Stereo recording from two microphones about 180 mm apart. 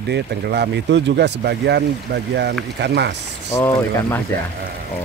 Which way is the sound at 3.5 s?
10° left (ahead or behind).